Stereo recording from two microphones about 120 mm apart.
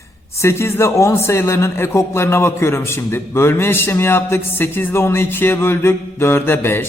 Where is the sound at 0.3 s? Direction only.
20° left (ahead or behind).